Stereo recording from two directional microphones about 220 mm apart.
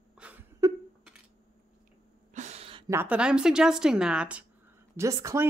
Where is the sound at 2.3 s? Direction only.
30° right (ahead or behind).